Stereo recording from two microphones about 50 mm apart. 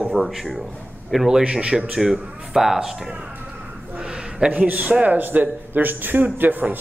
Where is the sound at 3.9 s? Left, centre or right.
Centre.